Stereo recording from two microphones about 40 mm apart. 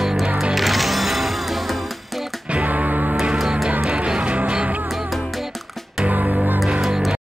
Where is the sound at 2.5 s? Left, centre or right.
Right.